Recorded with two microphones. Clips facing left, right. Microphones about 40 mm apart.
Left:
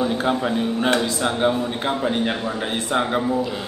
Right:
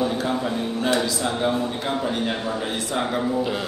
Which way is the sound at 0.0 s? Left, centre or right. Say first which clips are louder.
Left 2 dB; left.